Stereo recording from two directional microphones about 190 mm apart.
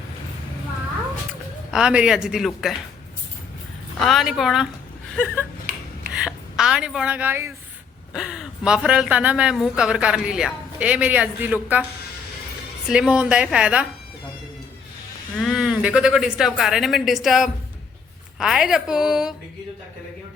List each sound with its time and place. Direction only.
1.7 s speech: 5° right (ahead or behind)
4.0 s speech: centre (ahead or behind)
5.7 s a sound: 45° right (ahead or behind)
6.1 s a woman's voice: 5° right (ahead or behind)
12.9 s speech: 5° right (ahead or behind)
15.4 s speech: centre (ahead or behind)